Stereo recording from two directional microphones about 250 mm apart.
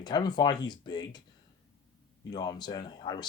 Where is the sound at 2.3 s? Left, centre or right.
Centre.